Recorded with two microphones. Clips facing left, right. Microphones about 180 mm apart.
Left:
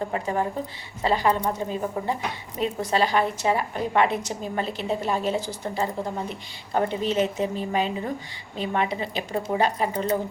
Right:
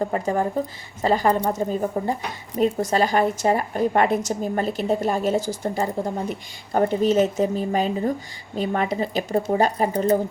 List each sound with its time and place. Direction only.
0.0 s a woman's voice: 40° right (ahead or behind)